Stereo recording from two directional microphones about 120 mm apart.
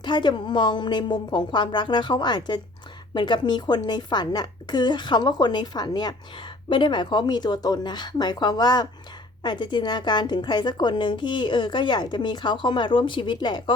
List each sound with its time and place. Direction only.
0.0 s a woman's voice: 40° left (ahead or behind)